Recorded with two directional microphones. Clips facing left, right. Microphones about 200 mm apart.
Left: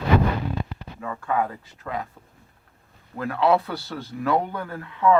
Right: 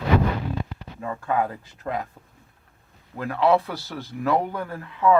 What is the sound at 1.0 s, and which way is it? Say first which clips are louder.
Speech: right 1 dB; 25° right (ahead or behind).